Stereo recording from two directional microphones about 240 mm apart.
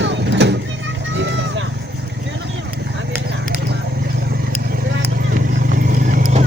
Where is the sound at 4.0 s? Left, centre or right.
Right.